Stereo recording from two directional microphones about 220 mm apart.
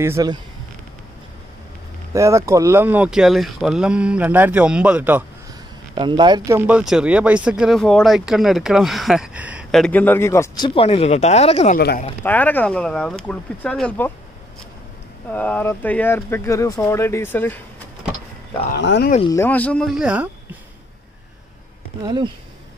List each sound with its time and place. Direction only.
0.0 s speech: 15° right (ahead or behind)
2.1 s speech: 15° right (ahead or behind)
5.9 s speech: 20° right (ahead or behind); by 11.8 s 30° left (ahead or behind)
12.2 s speech: 10° left (ahead or behind)
15.3 s speech: 5° left (ahead or behind)
18.7 s speech: 50° left (ahead or behind)
19.3 s speech: 10° left (ahead or behind)
22.0 s speech: 20° right (ahead or behind)